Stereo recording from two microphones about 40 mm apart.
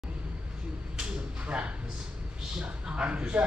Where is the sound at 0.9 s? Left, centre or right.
Right.